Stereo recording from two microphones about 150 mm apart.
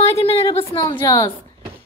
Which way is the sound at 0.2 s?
40° left (ahead or behind).